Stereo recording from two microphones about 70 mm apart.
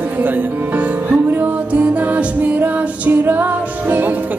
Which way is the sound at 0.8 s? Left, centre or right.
Right.